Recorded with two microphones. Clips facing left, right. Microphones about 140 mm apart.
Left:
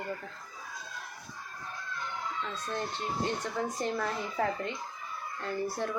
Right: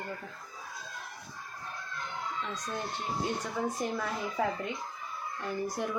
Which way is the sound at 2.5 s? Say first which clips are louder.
Left 1 dB; 10° right (ahead or behind).